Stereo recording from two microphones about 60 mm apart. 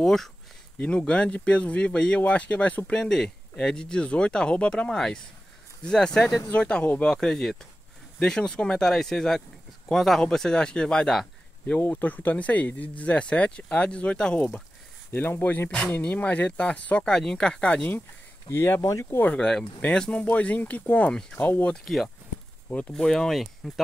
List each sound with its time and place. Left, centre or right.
0.0 s speech: centre
0.7 s speech: left
2.9 s speech: centre
11.9 s speech: left
15.3 s speech: left; by 17.8 s centre
18.5 s speech: left
18.8 s speech: left
19.2 s speech: centre
20.2 s speech: left
21.1 s speech: centre
21.4 s speech: left
21.7 s speech: centre
22.7 s speech: left
23.0 s speech: centre